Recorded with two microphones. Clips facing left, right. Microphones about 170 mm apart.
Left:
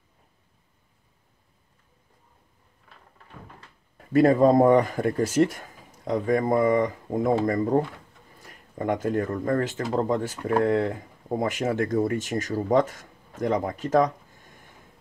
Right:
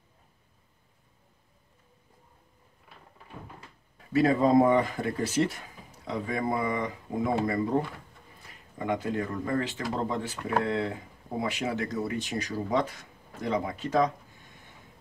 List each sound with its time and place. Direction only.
2.9 s cupboard open or close: 10° right (ahead or behind)
4.1 s speech: 50° left (ahead or behind)